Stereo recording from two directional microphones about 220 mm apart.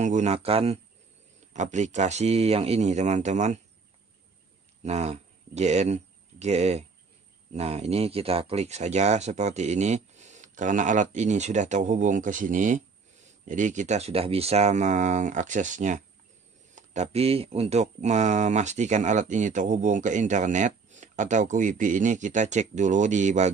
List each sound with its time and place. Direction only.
0.0 s speech: 30° right (ahead or behind)
4.8 s speech: 30° right (ahead or behind)